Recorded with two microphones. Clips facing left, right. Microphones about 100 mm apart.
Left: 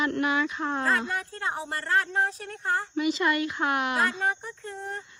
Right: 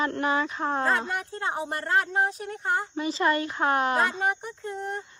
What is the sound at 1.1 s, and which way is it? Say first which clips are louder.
Speech: right 1 dB; 25° right (ahead or behind).